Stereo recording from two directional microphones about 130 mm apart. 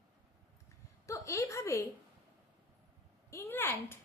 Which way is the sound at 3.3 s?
20° left (ahead or behind).